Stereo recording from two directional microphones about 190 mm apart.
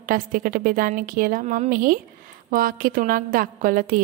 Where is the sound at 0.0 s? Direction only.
45° right (ahead or behind).